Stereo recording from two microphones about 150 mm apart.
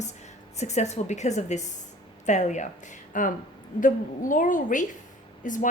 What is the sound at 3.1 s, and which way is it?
A woman's voice, 65° left (ahead or behind).